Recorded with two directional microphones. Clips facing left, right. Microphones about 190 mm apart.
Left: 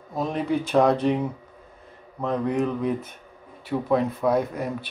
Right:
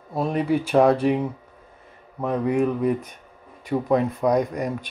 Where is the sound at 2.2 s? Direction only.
10° right (ahead or behind).